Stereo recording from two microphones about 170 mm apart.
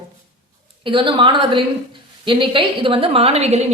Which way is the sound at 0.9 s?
30° right (ahead or behind).